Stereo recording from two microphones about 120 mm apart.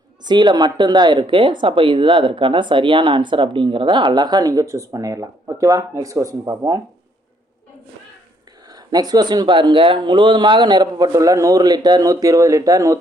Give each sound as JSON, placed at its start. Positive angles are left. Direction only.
{"t": 0.3, "sound": "speech", "side_deg": -40}
{"t": 8.7, "sound": "speech", "side_deg": -35}